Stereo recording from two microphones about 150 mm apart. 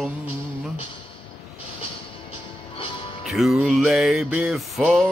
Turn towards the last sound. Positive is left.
turn(degrees=0)  # may be behind; listen again after turning